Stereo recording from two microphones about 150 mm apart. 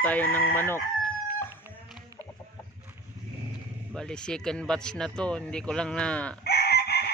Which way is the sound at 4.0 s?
5° left (ahead or behind).